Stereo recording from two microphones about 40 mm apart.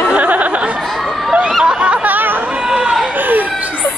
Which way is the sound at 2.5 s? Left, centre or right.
Centre.